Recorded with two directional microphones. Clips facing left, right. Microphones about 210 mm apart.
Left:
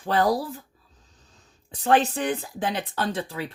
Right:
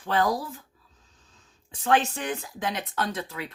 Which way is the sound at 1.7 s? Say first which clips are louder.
Left 3 dB; 35° left (ahead or behind).